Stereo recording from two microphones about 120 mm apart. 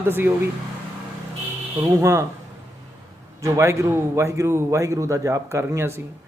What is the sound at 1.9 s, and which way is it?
Speech, 25° right (ahead or behind).